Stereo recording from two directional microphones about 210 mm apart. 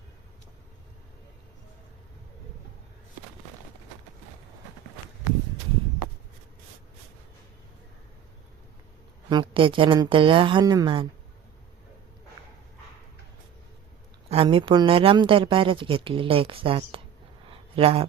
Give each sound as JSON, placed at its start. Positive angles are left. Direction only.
{"t": 9.3, "sound": "speech", "side_deg": -25}
{"t": 14.3, "sound": "speech", "side_deg": -25}
{"t": 17.5, "sound": "a sound", "side_deg": -25}